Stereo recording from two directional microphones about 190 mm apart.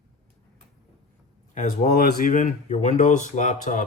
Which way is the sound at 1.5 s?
40° left (ahead or behind).